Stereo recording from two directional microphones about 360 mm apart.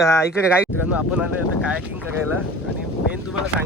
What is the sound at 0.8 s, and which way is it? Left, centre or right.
Speech, centre.